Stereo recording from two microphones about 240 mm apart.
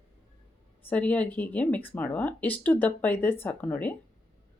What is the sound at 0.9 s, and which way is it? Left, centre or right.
Speech, centre.